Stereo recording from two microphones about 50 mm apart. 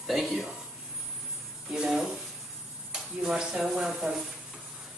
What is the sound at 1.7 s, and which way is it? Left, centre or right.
Speech, centre.